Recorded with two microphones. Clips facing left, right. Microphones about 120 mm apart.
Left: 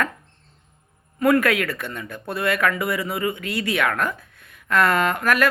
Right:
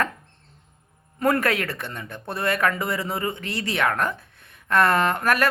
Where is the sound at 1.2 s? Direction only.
30° right (ahead or behind).